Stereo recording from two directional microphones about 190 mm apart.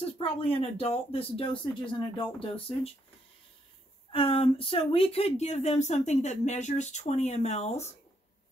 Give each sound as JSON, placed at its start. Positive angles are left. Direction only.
{"t": 0.2, "sound": "speech", "side_deg": 30}
{"t": 4.1, "sound": "speech", "side_deg": 30}